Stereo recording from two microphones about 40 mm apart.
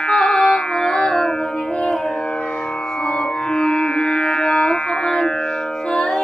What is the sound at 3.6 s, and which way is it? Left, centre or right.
Music, left.